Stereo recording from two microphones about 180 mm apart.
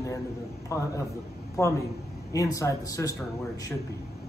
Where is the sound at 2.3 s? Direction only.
20° left (ahead or behind).